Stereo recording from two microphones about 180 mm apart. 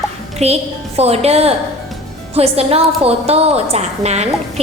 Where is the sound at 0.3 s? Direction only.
35° right (ahead or behind).